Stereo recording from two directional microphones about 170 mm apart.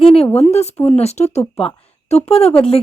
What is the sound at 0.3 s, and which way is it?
Speech, 40° left (ahead or behind).